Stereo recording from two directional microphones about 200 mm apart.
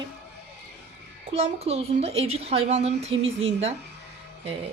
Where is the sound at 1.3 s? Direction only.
30° right (ahead or behind).